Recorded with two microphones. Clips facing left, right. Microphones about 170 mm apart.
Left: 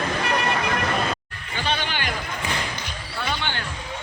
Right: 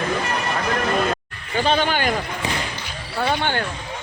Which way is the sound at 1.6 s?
45° right (ahead or behind).